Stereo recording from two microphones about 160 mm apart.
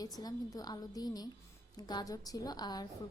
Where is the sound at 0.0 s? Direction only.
25° left (ahead or behind).